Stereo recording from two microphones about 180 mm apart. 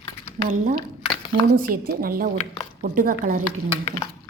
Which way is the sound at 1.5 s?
55° right (ahead or behind).